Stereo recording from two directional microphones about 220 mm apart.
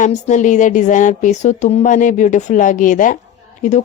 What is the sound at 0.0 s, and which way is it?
Speech, 35° left (ahead or behind).